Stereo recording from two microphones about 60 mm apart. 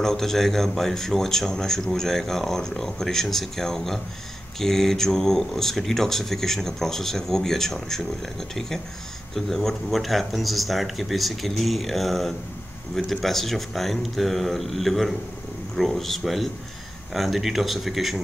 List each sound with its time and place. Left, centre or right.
0.0 s speech: centre